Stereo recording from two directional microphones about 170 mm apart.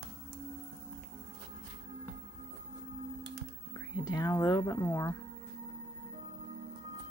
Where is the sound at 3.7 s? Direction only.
20° left (ahead or behind).